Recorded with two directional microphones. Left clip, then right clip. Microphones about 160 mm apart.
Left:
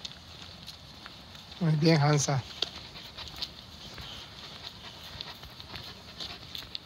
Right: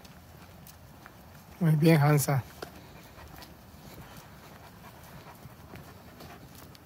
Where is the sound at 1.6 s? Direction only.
20° right (ahead or behind).